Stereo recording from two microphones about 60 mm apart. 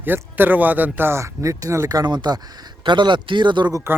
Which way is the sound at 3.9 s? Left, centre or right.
Right.